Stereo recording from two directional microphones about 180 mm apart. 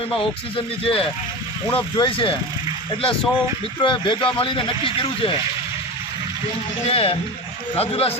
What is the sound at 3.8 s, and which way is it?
Speech, 25° left (ahead or behind).